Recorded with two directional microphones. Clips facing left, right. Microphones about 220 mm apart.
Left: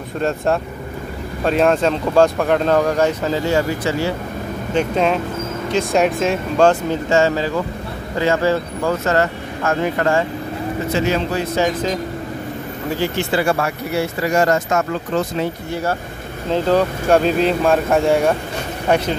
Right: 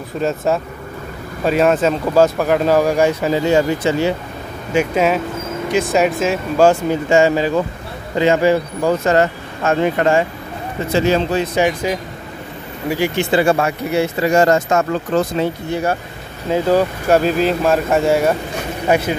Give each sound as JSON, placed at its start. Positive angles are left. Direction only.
{"t": 0.2, "sound": "speech", "side_deg": 0}
{"t": 4.7, "sound": "speech", "side_deg": -5}
{"t": 10.9, "sound": "speech", "side_deg": -30}
{"t": 11.5, "sound": "speech", "side_deg": -15}
{"t": 15.7, "sound": "speech", "side_deg": -15}